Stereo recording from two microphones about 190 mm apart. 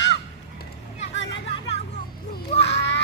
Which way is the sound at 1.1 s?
75° left (ahead or behind).